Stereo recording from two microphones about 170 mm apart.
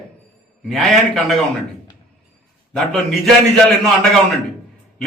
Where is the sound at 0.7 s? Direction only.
Centre (ahead or behind).